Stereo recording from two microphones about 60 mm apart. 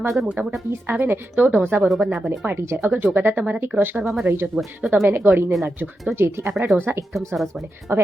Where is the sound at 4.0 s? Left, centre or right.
Centre.